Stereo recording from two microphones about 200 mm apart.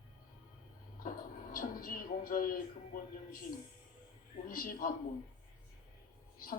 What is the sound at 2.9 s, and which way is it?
Speech, 50° left (ahead or behind).